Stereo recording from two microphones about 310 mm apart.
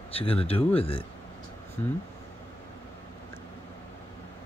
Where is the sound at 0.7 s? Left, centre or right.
Centre.